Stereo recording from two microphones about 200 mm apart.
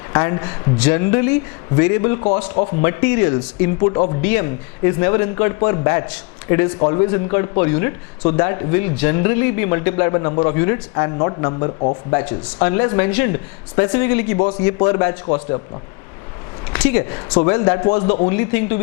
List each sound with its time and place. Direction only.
0.1 s speech: 20° left (ahead or behind)
2.8 s speech: 15° left (ahead or behind)
3.8 s speech: 30° left (ahead or behind)
4.3 s speech: 15° left (ahead or behind); by 11.9 s 30° left (ahead or behind)
12.1 s speech: 10° left (ahead or behind)
12.5 s speech: 20° left (ahead or behind)
16.7 s speech: 10° left (ahead or behind); by 18.3 s 30° left (ahead or behind)
18.3 s speech: 15° left (ahead or behind)